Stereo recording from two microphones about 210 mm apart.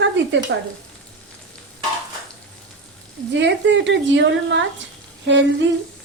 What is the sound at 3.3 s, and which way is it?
Speech, 60° right (ahead or behind).